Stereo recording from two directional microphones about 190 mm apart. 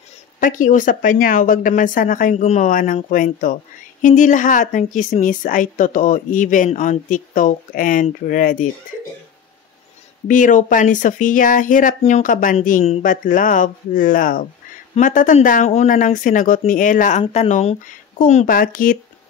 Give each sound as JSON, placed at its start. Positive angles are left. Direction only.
{"t": 0.4, "sound": "a woman's voice", "side_deg": 45}
{"t": 10.2, "sound": "a woman's voice", "side_deg": 40}